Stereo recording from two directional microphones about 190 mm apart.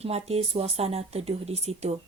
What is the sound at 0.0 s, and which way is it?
Speech, 35° right (ahead or behind).